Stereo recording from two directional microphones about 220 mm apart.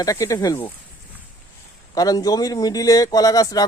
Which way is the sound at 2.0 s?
15° left (ahead or behind).